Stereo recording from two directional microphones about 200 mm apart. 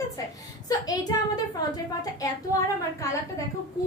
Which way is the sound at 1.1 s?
20° left (ahead or behind).